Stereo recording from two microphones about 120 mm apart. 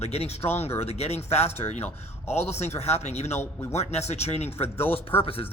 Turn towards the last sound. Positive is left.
turn(degrees=50)  # may be behind; listen again after turning